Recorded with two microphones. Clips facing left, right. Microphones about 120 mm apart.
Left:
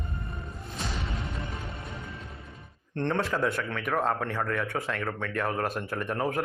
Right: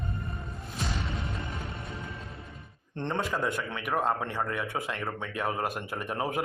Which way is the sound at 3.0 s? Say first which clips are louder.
Left 3 dB; 15° right (ahead or behind).